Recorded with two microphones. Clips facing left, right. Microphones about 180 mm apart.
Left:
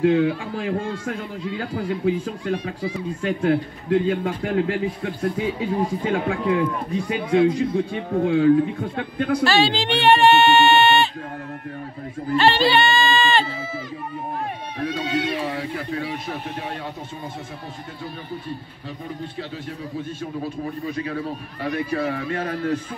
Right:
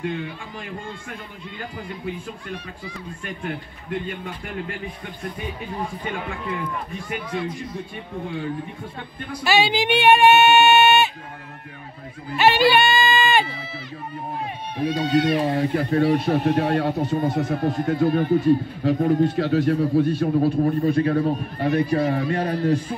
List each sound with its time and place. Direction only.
0.0 s a man's voice: 90° left
3.2 s a man's voice: 90° left
9.4 s speech: 15° right (ahead or behind)
12.4 s speech: 15° right (ahead or behind)
15.1 s speech: 40° right (ahead or behind)
16.4 s speech: 70° right (ahead or behind)
20.2 s a man's voice: 60° right (ahead or behind)
21.7 s speech: 40° right (ahead or behind)